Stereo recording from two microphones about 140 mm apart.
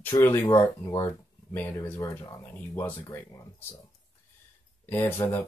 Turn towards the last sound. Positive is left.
turn(degrees=15)  # may be behind; listen again after turning